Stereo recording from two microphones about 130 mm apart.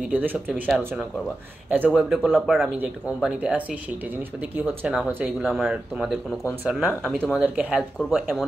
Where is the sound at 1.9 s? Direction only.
5° left (ahead or behind); by 4.9 s 15° right (ahead or behind).